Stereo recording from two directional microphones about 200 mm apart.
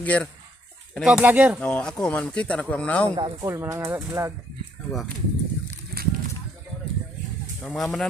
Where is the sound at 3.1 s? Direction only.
20° right (ahead or behind).